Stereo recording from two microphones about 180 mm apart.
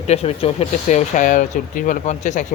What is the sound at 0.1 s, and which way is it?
A man's voice, 35° left (ahead or behind).